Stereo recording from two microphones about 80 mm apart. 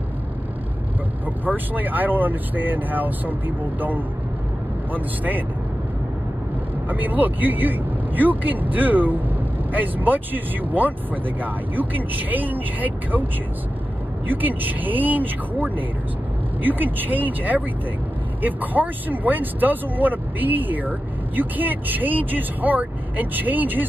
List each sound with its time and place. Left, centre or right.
1.2 s speech: right
6.9 s speech: right
14.2 s speech: right